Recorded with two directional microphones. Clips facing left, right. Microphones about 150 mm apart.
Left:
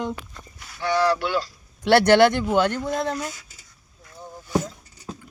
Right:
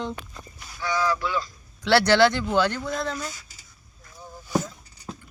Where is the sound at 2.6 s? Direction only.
15° left (ahead or behind).